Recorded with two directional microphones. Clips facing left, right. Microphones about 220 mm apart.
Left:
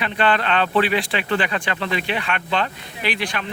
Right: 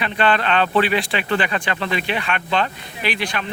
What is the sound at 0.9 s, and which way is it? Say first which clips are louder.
Speech: right 1 dB; 5° left (ahead or behind).